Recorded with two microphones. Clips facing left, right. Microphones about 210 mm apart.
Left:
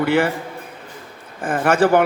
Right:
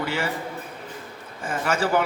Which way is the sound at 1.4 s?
55° left (ahead or behind).